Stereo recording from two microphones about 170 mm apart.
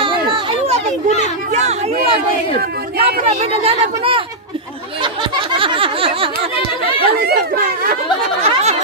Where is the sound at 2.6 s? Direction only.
65° right (ahead or behind).